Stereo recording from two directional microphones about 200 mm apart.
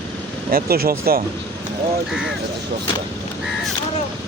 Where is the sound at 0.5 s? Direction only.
50° right (ahead or behind).